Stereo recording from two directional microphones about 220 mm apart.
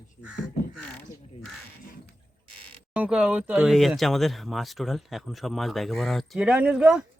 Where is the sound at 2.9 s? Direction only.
5° right (ahead or behind).